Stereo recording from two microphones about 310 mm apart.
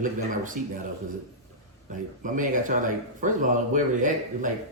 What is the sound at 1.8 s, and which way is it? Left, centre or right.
Speech, right.